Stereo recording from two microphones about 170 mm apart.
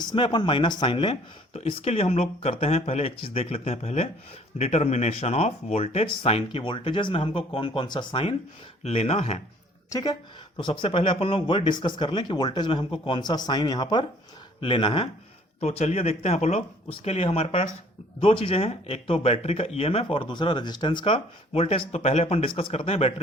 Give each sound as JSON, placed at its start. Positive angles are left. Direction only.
{"t": 0.1, "sound": "speech", "side_deg": 25}
{"t": 9.9, "sound": "speech", "side_deg": 25}
{"t": 15.6, "sound": "speech", "side_deg": 40}